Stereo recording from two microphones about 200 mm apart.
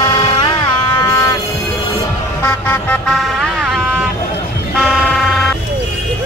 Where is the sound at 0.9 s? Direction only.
15° left (ahead or behind).